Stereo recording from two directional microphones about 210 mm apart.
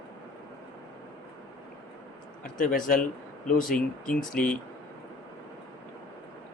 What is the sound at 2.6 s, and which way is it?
Speech, 40° left (ahead or behind).